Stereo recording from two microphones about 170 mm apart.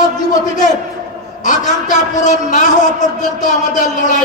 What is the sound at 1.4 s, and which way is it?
A man's voice, 50° left (ahead or behind).